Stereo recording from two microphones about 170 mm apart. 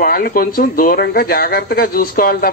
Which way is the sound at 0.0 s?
60° left (ahead or behind).